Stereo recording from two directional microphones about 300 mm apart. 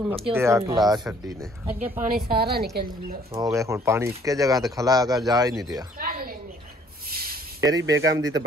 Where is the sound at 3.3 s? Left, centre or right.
Centre.